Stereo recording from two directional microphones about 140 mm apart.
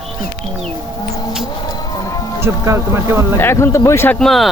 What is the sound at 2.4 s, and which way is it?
Speech, 20° right (ahead or behind).